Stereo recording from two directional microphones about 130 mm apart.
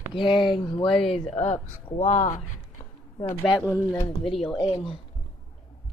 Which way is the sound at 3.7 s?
15° left (ahead or behind).